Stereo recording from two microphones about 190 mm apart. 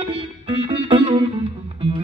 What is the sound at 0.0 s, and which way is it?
Music, 25° right (ahead or behind).